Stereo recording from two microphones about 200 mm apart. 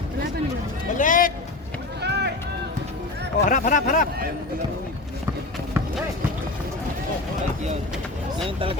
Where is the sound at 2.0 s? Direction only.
55° right (ahead or behind).